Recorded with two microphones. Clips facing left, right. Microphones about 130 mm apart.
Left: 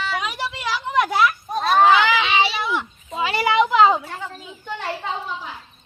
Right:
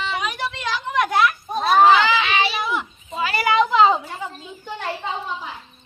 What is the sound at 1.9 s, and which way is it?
Children playing, 15° left (ahead or behind).